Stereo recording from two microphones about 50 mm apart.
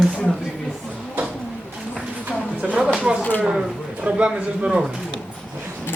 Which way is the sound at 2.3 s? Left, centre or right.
Right.